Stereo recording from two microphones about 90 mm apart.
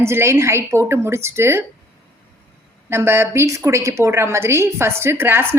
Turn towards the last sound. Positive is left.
turn(degrees=-25)  # may be behind; listen again after turning